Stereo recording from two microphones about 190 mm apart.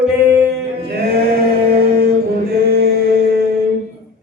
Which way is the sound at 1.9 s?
55° right (ahead or behind).